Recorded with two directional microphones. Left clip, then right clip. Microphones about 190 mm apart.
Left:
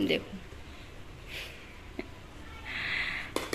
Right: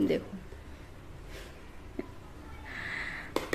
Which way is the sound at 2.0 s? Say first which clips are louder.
Right 1 dB; 20° right (ahead or behind).